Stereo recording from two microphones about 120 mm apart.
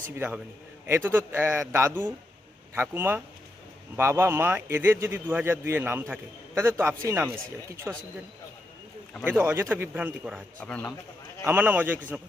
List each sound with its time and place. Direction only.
0.2 s a man's voice: 15° right (ahead or behind)
9.4 s a man's voice: 20° right (ahead or behind)
10.6 s speech: 10° left (ahead or behind)
11.4 s a man's voice: 15° right (ahead or behind)